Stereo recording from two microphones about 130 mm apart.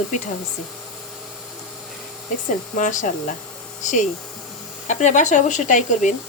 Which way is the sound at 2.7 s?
75° left (ahead or behind).